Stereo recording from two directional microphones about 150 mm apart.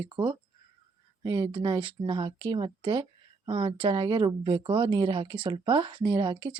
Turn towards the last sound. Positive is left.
turn(degrees=-30)  # may be behind; listen again after turning